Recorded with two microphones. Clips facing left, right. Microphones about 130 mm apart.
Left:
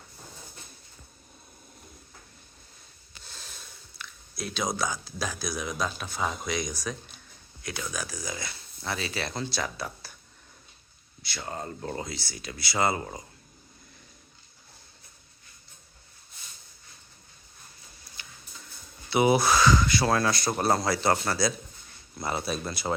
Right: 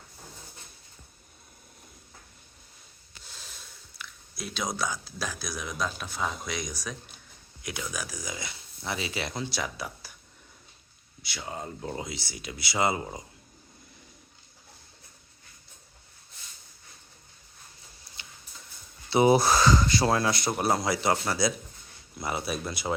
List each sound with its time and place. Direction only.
3.2 s a sound: 5° right (ahead or behind)
4.8 s speech: centre (ahead or behind)
11.2 s speech: 10° right (ahead or behind)
19.1 s speech: 35° right (ahead or behind)
20.1 s speech: 20° right (ahead or behind)
20.6 s speech: 10° right (ahead or behind)